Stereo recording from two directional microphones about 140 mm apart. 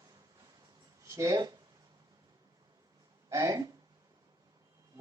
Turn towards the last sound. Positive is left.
turn(degrees=-25)  # may be behind; listen again after turning